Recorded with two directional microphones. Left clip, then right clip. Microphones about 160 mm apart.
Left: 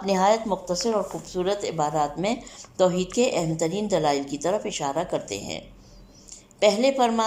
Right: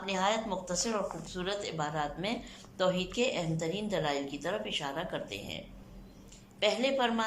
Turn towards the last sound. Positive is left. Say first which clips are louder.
# left 9 dB
turn(degrees=30)  # may be behind; listen again after turning